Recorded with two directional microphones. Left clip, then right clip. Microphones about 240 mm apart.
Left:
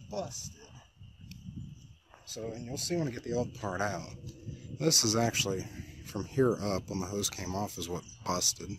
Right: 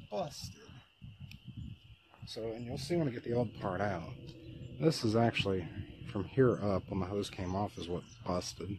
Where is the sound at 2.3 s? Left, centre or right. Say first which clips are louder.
Left 1 dB; left.